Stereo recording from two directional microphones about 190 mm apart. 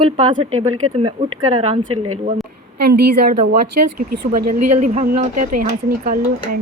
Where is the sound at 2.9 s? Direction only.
50° right (ahead or behind).